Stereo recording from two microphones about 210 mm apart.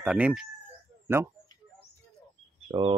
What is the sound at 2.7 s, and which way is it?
Speech, 25° right (ahead or behind).